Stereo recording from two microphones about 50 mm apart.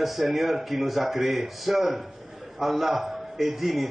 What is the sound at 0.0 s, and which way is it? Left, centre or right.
A man's voice, centre.